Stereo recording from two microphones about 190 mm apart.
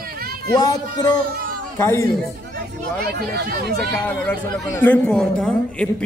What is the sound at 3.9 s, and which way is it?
A woman's voice, 5° left (ahead or behind).